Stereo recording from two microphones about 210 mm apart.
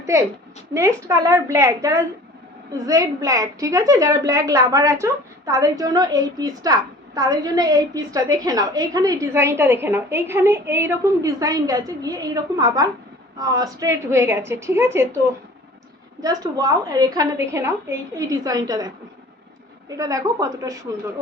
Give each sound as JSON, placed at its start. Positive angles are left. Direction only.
{"t": 0.1, "sound": "a woman's voice", "side_deg": -15}
{"t": 16.2, "sound": "a woman's voice", "side_deg": -15}
{"t": 20.0, "sound": "a woman's voice", "side_deg": -15}